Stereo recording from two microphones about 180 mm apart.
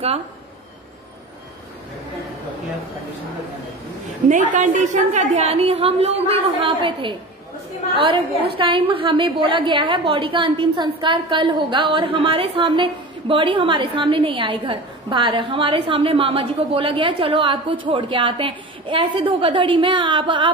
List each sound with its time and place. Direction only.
4.3 s a woman's voice: 45° right (ahead or behind); by 7.2 s 30° right (ahead or behind)
8.5 s a woman's voice: 30° right (ahead or behind)